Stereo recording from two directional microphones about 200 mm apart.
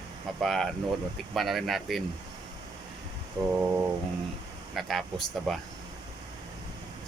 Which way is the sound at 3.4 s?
20° right (ahead or behind).